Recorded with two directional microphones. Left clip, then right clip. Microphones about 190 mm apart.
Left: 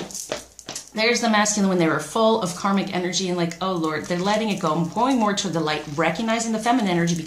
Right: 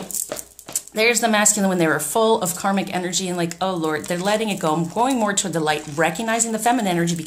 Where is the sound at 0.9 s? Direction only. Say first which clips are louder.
Right 2 dB; 45° right (ahead or behind).